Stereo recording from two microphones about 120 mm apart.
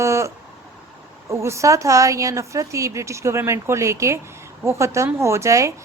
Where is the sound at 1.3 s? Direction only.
25° right (ahead or behind).